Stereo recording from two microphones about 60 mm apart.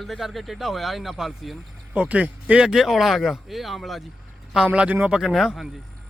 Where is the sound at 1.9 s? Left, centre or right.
Right.